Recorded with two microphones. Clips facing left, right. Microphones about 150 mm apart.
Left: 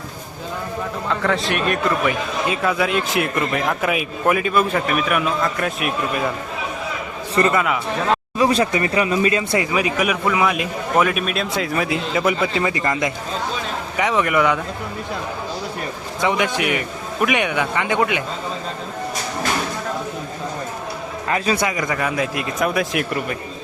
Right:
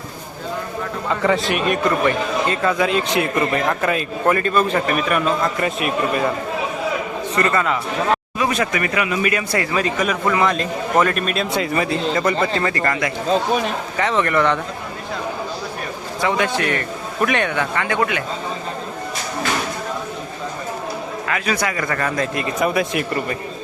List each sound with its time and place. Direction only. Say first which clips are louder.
1.2 s speech: right 3 dB; centre (ahead or behind)
7.4 s a man's voice: even; 5° left (ahead or behind)
8.4 s speech: left 3 dB; 30° left (ahead or behind)
9.7 s a man's voice: even; 10° left (ahead or behind)
16.2 s a man's voice: even; 15° left (ahead or behind)
21.3 s speech: left 2 dB; 30° left (ahead or behind); by 23.4 s centre (ahead or behind)